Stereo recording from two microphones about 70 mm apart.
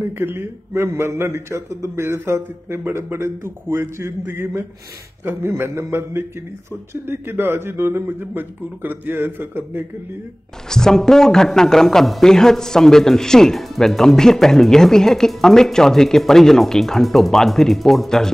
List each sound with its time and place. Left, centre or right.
0.0 s a man's voice: right
10.7 s a man's voice: centre